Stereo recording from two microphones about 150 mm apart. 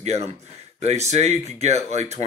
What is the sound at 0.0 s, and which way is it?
A man's voice, 45° right (ahead or behind).